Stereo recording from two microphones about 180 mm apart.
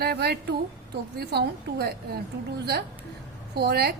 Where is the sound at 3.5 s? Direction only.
60° right (ahead or behind).